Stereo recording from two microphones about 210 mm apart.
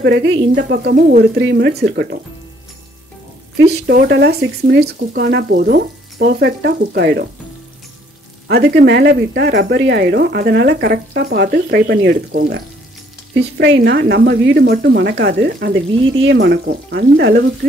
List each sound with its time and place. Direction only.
0.0 s speech: 55° right (ahead or behind)
3.7 s speech: 50° right (ahead or behind)
8.5 s speech: 55° right (ahead or behind)
13.6 s speech: 55° right (ahead or behind)